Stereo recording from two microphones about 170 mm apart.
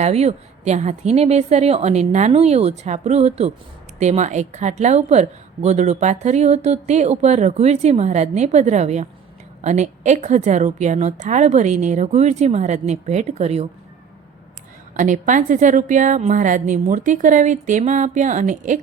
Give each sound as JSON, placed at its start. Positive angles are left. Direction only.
{"t": 0.0, "sound": "a woman's voice", "side_deg": -40}
{"t": 14.9, "sound": "a woman's voice", "side_deg": -50}